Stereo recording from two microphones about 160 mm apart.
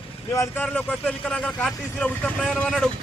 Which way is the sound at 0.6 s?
10° left (ahead or behind).